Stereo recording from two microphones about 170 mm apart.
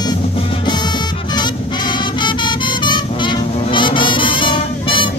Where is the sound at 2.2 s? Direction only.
25° left (ahead or behind).